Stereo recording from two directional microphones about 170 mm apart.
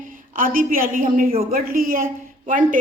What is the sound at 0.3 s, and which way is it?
A woman's voice, 55° right (ahead or behind).